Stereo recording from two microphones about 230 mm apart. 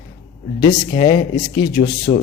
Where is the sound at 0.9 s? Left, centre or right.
Left.